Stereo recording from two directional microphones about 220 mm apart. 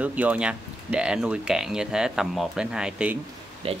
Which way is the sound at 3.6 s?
25° right (ahead or behind).